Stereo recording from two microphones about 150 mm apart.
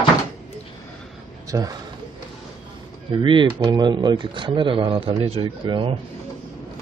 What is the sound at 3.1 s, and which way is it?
Speech, 35° right (ahead or behind).